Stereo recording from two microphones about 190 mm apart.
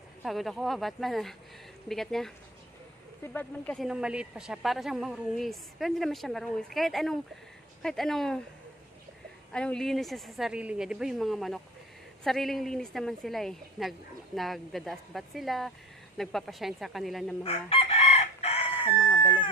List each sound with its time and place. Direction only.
0.2 s a woman's voice: centre (ahead or behind)
3.3 s speech: 10° left (ahead or behind)
3.8 s a woman's voice: 5° right (ahead or behind)
9.5 s a woman's voice: 5° left (ahead or behind)
17.4 s chicken: 30° left (ahead or behind)
19.0 s speech: 10° left (ahead or behind)